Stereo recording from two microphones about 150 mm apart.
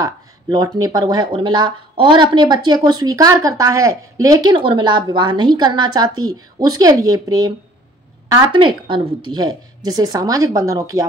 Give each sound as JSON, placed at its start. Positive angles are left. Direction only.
{"t": 0.0, "sound": "speech", "side_deg": -25}